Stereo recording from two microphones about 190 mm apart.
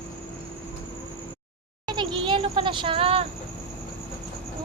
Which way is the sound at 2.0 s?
25° right (ahead or behind).